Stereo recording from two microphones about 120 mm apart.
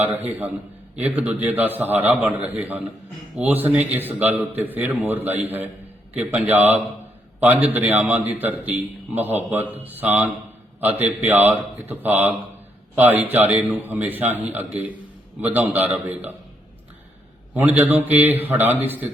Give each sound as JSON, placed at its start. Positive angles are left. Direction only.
{"t": 0.3, "sound": "a man's voice", "side_deg": -15}
{"t": 17.5, "sound": "a man's voice", "side_deg": -15}